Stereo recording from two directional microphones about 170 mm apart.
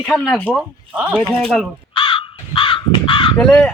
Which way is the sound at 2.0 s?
30° left (ahead or behind).